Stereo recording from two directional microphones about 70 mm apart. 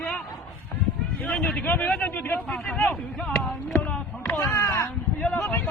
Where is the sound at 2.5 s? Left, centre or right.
Centre.